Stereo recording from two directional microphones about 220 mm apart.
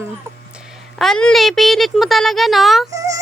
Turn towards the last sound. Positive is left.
turn(degrees=-15)  # may be behind; listen again after turning